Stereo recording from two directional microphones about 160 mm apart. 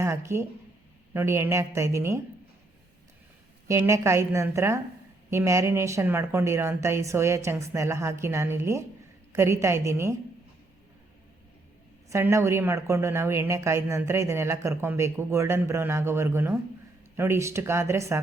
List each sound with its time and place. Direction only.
0.0 s speech: 15° right (ahead or behind)
3.7 s speech: 15° right (ahead or behind)
12.0 s speech: 20° right (ahead or behind)